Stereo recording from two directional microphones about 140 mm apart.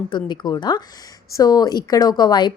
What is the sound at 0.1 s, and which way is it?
A woman's voice, 30° left (ahead or behind).